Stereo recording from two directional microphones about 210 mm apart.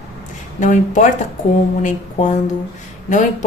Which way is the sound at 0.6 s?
35° left (ahead or behind).